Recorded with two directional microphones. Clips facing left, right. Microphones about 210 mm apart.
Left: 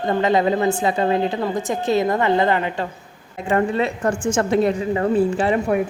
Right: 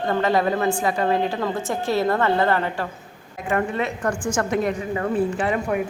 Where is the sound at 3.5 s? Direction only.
30° left (ahead or behind).